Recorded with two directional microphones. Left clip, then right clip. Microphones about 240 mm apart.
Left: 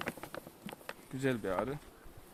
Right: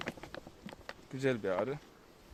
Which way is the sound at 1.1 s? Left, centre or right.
Right.